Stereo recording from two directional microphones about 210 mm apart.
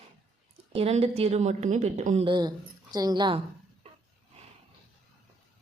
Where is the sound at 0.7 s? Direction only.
30° right (ahead or behind).